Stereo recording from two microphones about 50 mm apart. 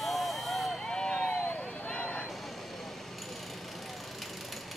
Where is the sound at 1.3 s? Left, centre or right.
Left.